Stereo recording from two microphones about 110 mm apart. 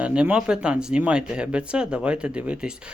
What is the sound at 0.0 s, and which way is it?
Speech, 10° right (ahead or behind).